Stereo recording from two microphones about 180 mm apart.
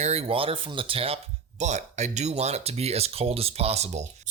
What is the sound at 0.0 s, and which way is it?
Speech, 35° right (ahead or behind).